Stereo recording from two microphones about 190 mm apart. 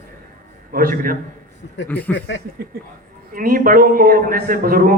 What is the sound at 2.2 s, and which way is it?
Speech, 70° left (ahead or behind).